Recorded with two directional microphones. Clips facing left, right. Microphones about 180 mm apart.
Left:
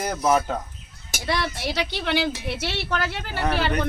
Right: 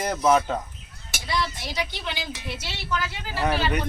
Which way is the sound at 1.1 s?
60° left (ahead or behind).